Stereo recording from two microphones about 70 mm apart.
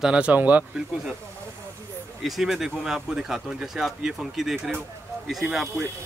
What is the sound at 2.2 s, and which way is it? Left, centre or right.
Speech, centre.